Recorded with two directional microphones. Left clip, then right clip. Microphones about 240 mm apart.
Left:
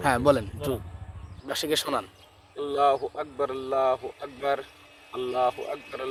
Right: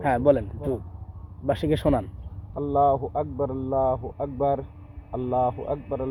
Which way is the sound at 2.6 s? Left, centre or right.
Left.